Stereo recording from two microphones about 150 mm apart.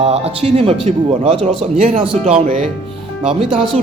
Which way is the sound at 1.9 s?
60° right (ahead or behind).